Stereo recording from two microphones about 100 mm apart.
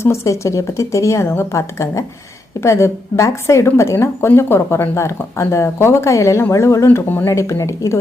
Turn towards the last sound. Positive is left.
turn(degrees=30)  # may be behind; listen again after turning